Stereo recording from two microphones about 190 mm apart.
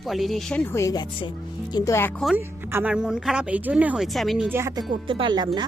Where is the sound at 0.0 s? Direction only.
Centre (ahead or behind).